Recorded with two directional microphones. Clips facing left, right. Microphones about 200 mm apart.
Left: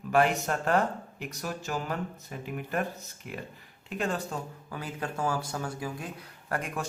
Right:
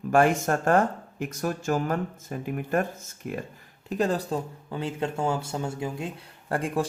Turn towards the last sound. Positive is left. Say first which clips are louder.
# right 6 dB
turn(degrees=-30)  # may be behind; listen again after turning